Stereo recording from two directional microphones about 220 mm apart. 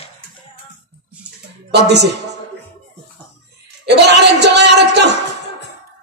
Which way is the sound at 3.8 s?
50° right (ahead or behind).